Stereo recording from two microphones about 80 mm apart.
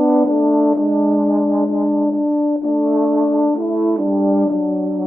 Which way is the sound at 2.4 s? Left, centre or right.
Left.